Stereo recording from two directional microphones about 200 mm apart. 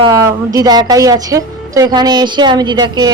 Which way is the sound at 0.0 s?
20° right (ahead or behind).